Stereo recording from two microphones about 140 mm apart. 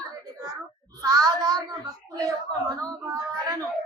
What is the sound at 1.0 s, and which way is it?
Speech, 25° right (ahead or behind).